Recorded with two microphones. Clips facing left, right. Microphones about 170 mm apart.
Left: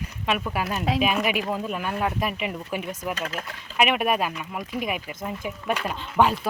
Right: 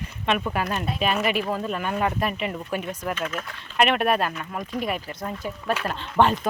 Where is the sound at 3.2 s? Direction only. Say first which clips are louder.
Right 2 dB; 35° left (ahead or behind).